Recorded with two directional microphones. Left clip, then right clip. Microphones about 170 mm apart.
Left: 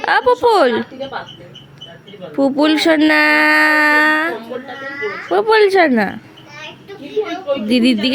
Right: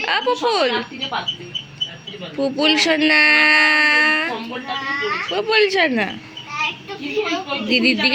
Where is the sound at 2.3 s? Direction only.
90° left.